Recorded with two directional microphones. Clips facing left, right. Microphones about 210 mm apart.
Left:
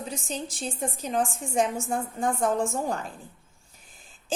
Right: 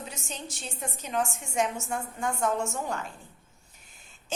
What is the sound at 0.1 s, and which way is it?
A woman's voice, 35° left (ahead or behind).